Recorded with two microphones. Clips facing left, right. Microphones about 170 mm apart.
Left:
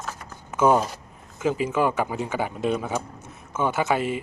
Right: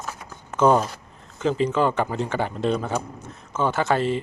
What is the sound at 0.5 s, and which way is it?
Speech, 10° left (ahead or behind).